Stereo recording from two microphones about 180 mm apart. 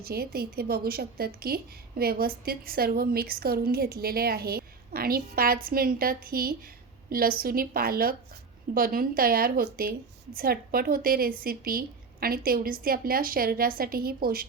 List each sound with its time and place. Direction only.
0.0 s a woman's voice: 60° right (ahead or behind)